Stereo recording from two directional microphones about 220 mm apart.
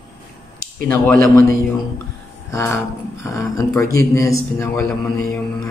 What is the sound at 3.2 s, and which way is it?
Speech, 15° left (ahead or behind).